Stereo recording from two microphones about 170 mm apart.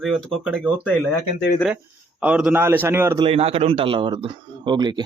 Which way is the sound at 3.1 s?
35° right (ahead or behind).